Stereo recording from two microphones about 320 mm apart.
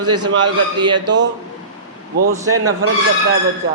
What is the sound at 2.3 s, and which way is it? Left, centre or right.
Speech, right.